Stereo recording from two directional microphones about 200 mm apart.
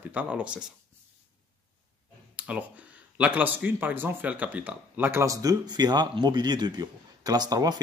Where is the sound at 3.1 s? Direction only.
5° right (ahead or behind).